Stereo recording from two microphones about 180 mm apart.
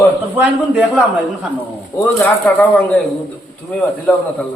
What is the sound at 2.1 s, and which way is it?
Speech, 10° left (ahead or behind).